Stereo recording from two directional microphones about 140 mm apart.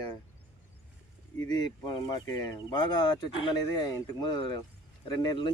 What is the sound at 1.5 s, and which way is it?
Speech, 30° left (ahead or behind).